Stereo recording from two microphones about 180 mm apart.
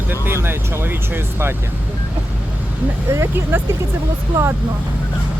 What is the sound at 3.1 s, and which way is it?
Speech, 15° right (ahead or behind).